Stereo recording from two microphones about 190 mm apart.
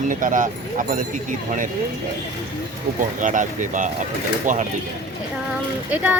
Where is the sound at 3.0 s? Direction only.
45° right (ahead or behind).